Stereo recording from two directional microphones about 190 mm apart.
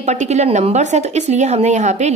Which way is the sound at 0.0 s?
35° right (ahead or behind).